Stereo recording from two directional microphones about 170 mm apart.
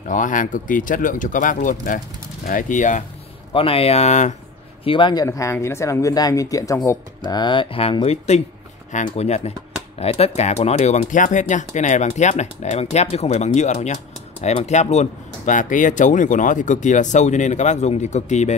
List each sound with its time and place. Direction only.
0.1 s speech: 50° left (ahead or behind)
3.5 s speech: 35° left (ahead or behind)
4.8 s speech: 30° left (ahead or behind)